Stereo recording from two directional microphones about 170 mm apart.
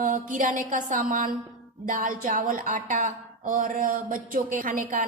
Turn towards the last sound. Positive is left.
turn(degrees=-50)  # may be behind; listen again after turning